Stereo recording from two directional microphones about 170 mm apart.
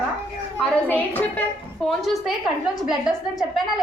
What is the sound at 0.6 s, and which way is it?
A woman's voice, 10° left (ahead or behind).